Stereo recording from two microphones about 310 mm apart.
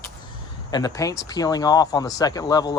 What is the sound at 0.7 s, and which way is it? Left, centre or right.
Speech, centre.